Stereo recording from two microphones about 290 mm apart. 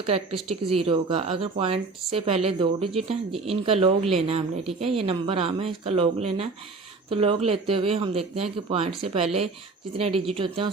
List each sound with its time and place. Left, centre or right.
0.0 s speech: centre